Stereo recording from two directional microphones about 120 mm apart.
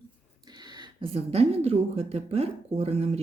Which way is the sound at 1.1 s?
60° right (ahead or behind).